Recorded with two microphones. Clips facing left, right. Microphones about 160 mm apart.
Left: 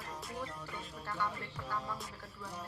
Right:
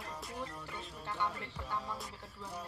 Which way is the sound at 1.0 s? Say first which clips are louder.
Right 1 dB; 20° right (ahead or behind).